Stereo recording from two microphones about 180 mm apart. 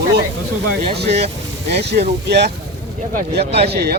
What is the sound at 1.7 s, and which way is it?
Speech, 65° right (ahead or behind).